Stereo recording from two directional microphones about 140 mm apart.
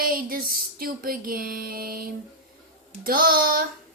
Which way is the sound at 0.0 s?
90° right.